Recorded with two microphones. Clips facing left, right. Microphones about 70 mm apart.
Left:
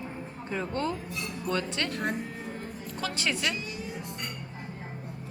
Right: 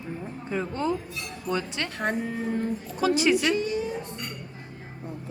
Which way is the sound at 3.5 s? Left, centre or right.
Right.